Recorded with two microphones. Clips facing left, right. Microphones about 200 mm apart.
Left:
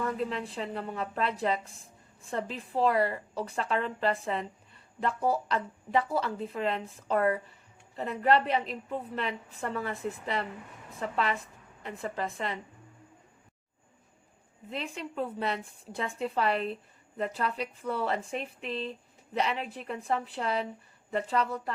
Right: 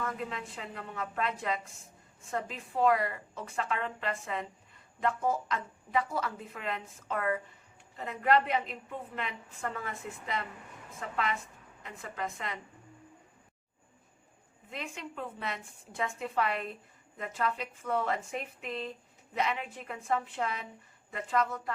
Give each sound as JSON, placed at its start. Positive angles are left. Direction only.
{"t": 0.2, "sound": "a woman's voice", "side_deg": 30}
{"t": 11.8, "sound": "a woman's voice", "side_deg": 35}
{"t": 14.7, "sound": "a woman's voice", "side_deg": 35}